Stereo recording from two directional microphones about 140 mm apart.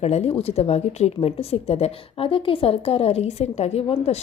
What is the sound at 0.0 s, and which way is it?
A woman's voice, 50° left (ahead or behind).